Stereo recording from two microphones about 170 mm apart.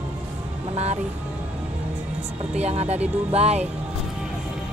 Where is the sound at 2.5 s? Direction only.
40° right (ahead or behind).